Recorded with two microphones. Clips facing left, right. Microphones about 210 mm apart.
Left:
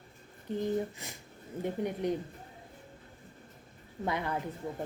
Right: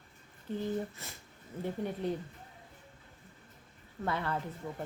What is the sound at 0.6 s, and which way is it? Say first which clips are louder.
A woman's voice: left 4 dB; 15° left (ahead or behind).